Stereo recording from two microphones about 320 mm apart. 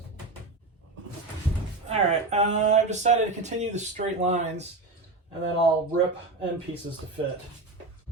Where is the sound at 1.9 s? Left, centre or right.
Centre.